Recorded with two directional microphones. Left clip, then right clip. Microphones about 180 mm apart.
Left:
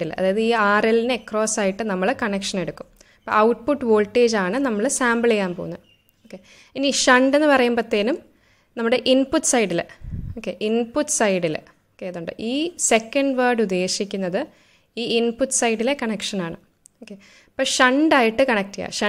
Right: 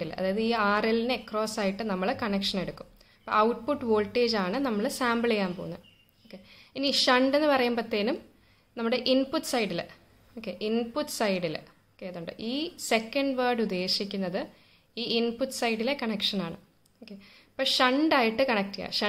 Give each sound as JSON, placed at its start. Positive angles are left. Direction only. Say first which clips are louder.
{"t": 0.0, "sound": "a woman's voice", "louder": "left 9 dB", "side_deg": 40}